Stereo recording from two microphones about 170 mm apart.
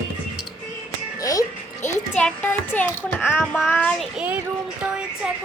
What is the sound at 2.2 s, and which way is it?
A woman's voice, 10° left (ahead or behind).